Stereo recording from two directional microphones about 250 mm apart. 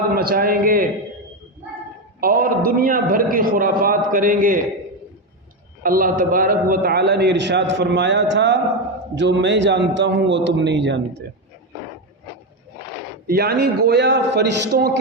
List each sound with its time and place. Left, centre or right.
0.2 s a man's voice: right
2.2 s a man's voice: right
5.8 s a man's voice: right
13.2 s a man's voice: right